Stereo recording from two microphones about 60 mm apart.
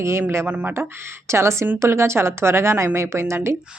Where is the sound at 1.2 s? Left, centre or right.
Right.